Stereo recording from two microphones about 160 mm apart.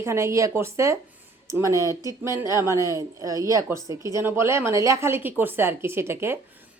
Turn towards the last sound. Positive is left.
turn(degrees=-15)  # may be behind; listen again after turning